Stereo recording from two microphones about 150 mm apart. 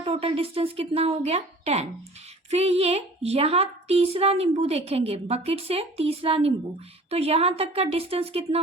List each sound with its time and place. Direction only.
0.0 s speech: 40° right (ahead or behind)